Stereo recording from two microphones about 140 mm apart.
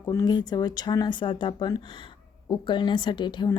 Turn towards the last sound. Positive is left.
turn(degrees=30)  # may be behind; listen again after turning